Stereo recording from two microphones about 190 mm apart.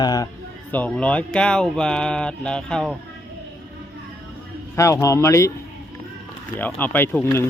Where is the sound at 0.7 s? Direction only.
5° left (ahead or behind).